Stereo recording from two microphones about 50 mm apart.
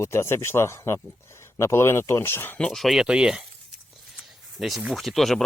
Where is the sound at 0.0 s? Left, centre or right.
Left.